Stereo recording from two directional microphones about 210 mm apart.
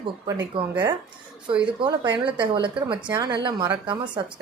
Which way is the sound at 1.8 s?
20° right (ahead or behind).